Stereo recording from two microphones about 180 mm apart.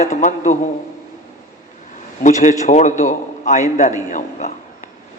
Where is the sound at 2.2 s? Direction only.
45° left (ahead or behind).